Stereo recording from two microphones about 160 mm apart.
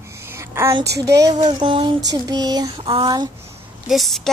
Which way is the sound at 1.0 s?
20° right (ahead or behind).